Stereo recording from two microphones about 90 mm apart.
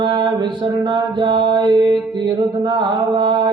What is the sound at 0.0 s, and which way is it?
Mantra, 65° right (ahead or behind).